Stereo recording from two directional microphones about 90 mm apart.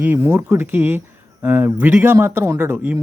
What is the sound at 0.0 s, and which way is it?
Speech, 25° right (ahead or behind).